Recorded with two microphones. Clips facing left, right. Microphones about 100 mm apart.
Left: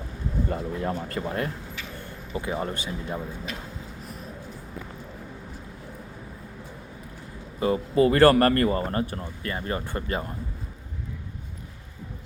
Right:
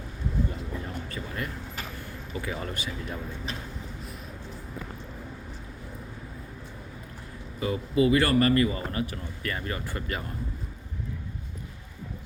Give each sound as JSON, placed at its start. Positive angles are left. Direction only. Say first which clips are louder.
{"t": 0.5, "sound": "speech", "louder": "left 8 dB", "side_deg": 65}
{"t": 1.0, "sound": "speech", "louder": "left 6 dB", "side_deg": 45}
{"t": 2.4, "sound": "speech", "louder": "left 4 dB", "side_deg": 30}
{"t": 7.6, "sound": "speech", "louder": "left 3 dB", "side_deg": 40}